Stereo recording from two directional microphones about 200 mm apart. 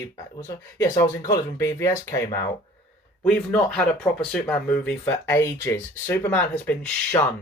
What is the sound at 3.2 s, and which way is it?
Speech, 5° left (ahead or behind).